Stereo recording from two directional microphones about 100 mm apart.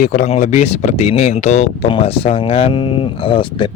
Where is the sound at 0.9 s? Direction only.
90° left.